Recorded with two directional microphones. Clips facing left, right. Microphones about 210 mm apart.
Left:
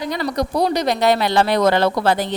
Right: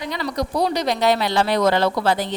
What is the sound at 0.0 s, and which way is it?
A woman's voice, 45° left (ahead or behind).